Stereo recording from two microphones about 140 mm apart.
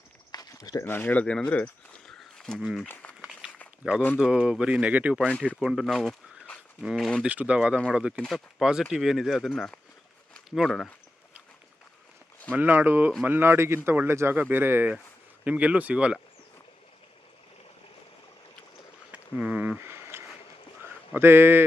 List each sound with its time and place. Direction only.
0.3 s walk: 30° left (ahead or behind)
0.9 s speech: 15° left (ahead or behind)
2.9 s a sound: 10° left (ahead or behind)
3.2 s a sound: 5° right (ahead or behind)
3.8 s speech: 10° right (ahead or behind)
7.3 s speech: 10° right (ahead or behind)
12.5 s speech: 15° right (ahead or behind)
19.1 s a sound: 10° right (ahead or behind)
21.1 s speech: 15° right (ahead or behind)